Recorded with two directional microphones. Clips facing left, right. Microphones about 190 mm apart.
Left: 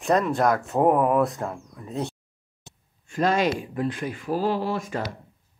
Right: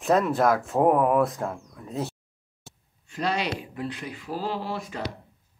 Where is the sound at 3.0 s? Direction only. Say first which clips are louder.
Left 6 dB; 50° left (ahead or behind).